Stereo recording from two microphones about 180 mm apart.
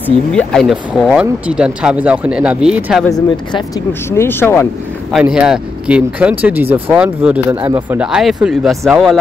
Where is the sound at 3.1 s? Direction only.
25° left (ahead or behind).